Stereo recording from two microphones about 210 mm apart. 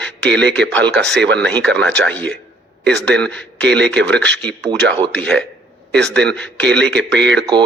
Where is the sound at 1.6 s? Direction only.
5° left (ahead or behind).